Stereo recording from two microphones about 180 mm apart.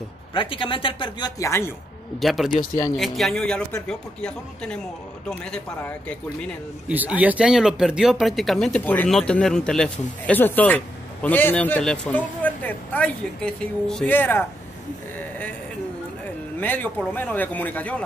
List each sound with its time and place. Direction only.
0.3 s speech: 30° left (ahead or behind)
1.4 s speech: 15° left (ahead or behind)
2.1 s speech: centre (ahead or behind)
2.5 s speech: 50° left (ahead or behind)
3.0 s speech: centre (ahead or behind)
6.9 s speech: 10° right (ahead or behind); by 14.4 s 10° left (ahead or behind)
16.5 s speech: 10° left (ahead or behind)